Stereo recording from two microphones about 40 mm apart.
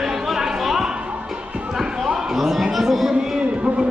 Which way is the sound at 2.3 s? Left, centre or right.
Centre.